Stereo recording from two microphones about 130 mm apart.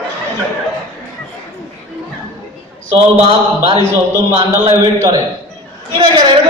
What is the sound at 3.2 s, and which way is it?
Speech, 45° right (ahead or behind).